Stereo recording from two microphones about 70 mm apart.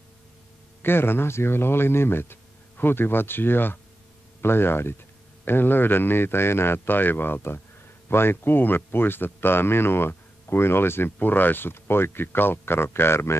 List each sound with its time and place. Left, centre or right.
0.8 s speech: left